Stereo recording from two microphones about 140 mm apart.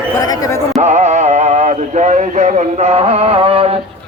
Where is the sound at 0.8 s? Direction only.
55° right (ahead or behind).